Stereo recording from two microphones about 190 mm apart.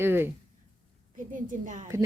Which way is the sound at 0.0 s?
10° right (ahead or behind).